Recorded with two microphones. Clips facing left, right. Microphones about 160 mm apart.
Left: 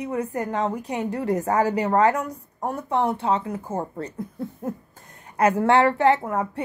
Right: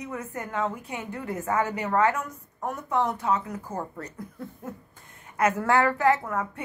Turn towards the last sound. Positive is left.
turn(degrees=30)  # may be behind; listen again after turning